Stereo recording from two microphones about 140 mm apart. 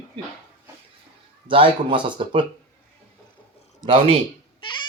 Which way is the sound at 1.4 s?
40° right (ahead or behind).